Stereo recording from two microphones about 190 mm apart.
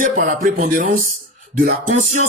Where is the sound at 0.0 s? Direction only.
45° right (ahead or behind).